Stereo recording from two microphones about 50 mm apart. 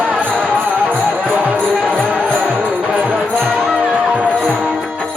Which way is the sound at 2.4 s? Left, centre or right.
Right.